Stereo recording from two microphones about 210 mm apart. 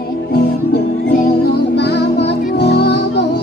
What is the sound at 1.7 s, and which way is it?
Music, 55° left (ahead or behind).